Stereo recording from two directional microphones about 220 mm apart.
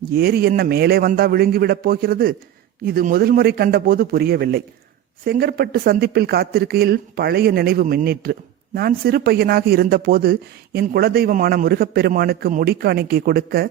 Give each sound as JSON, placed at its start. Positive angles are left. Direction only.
{"t": 0.1, "sound": "speech", "side_deg": -45}